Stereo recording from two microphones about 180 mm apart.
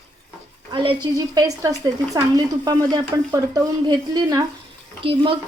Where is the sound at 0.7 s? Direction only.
30° right (ahead or behind).